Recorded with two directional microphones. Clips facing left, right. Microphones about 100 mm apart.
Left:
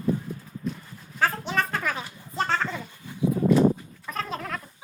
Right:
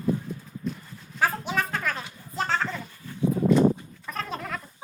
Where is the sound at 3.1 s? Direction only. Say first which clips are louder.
Right 1 dB; 15° left (ahead or behind).